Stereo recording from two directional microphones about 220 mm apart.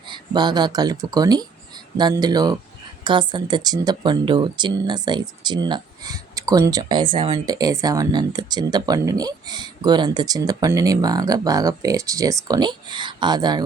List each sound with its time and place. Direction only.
0.1 s speech: 20° right (ahead or behind)